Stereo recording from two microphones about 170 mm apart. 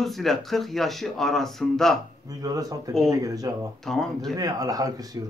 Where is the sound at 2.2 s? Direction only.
20° right (ahead or behind).